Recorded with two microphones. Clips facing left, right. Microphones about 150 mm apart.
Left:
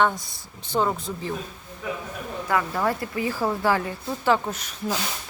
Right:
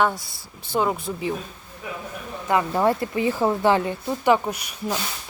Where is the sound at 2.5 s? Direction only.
25° right (ahead or behind).